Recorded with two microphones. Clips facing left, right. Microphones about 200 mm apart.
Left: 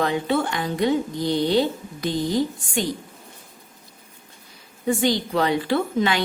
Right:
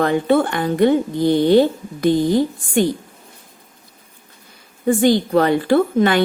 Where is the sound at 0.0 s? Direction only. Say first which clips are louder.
Right 6 dB; 50° right (ahead or behind).